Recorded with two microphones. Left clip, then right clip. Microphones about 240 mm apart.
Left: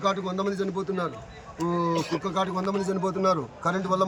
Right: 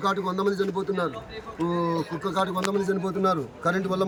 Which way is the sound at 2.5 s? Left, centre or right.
Centre.